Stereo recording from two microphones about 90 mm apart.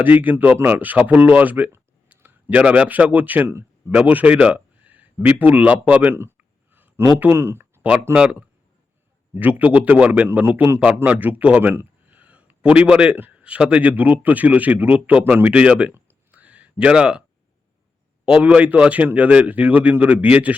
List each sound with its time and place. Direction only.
0.0 s a man's voice: 20° right (ahead or behind)
10.8 s a man's voice: 15° right (ahead or behind)
11.7 s a sound: 25° right (ahead or behind)
12.2 s a man's voice: 15° right (ahead or behind)
16.0 s a sound: 20° right (ahead or behind)
18.4 s a man's voice: 15° right (ahead or behind)